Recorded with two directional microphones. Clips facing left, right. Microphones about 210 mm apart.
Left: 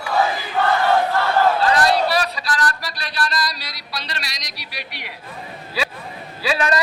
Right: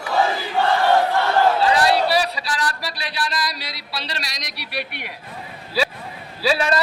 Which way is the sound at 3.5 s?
25° right (ahead or behind).